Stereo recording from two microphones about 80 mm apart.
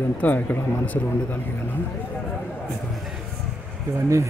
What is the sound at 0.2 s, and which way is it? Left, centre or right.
Speech, left.